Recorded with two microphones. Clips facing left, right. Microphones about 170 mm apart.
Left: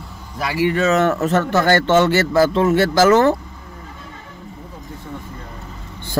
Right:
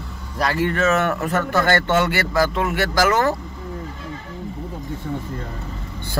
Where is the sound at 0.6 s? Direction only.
20° left (ahead or behind).